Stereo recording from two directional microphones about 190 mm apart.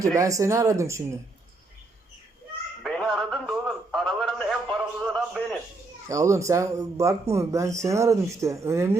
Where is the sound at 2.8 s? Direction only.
Centre (ahead or behind).